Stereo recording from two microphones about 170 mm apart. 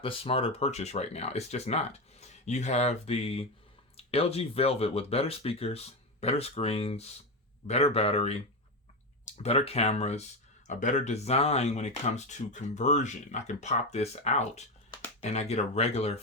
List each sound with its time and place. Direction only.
0.0 s speech: 35° left (ahead or behind)